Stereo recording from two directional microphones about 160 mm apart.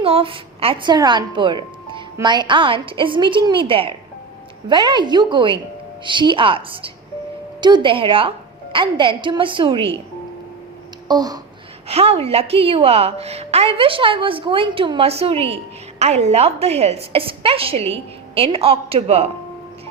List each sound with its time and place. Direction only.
0.0 s a woman's voice: 35° right (ahead or behind)
11.1 s a woman's voice: 25° right (ahead or behind)
11.9 s a woman's voice: 40° right (ahead or behind)